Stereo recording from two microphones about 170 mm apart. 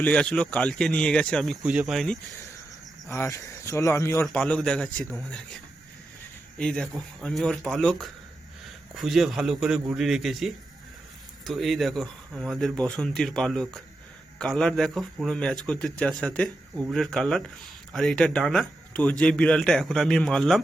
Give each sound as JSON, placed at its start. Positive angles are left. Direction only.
{"t": 0.0, "sound": "speech", "side_deg": 5}
{"t": 3.1, "sound": "speech", "side_deg": 15}
{"t": 6.6, "sound": "speech", "side_deg": 5}